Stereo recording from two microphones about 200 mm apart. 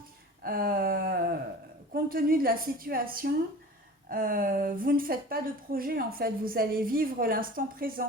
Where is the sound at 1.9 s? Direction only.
45° right (ahead or behind).